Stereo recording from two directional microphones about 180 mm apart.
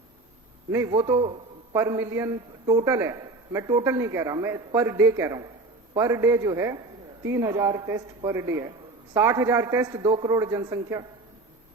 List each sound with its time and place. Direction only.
0.7 s a man's voice: 15° right (ahead or behind)
0.9 s a man's voice: 25° right (ahead or behind)